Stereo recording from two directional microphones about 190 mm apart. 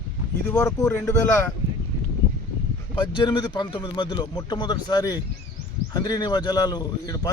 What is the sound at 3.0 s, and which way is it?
A man's voice, 25° left (ahead or behind).